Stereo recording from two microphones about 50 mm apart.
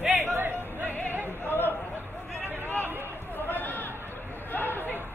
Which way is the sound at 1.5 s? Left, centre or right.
Left.